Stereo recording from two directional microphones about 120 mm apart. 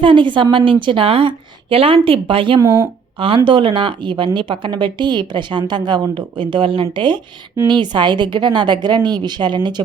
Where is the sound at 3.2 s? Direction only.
45° right (ahead or behind).